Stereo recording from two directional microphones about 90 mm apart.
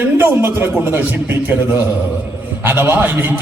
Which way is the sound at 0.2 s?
25° right (ahead or behind).